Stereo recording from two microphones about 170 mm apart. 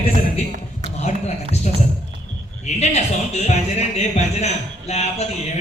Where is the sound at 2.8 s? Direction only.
40° left (ahead or behind).